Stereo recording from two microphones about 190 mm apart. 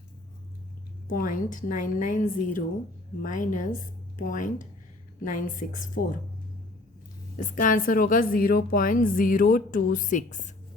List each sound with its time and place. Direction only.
1.0 s a woman's voice: 45° left (ahead or behind)
7.3 s a woman's voice: 40° left (ahead or behind)